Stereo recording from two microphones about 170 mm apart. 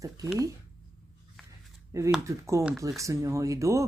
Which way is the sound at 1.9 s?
15° right (ahead or behind).